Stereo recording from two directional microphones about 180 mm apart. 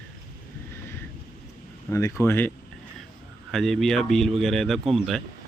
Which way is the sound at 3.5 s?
Centre (ahead or behind).